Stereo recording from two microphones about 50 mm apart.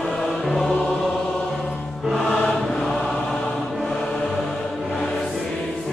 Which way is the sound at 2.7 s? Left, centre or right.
Centre.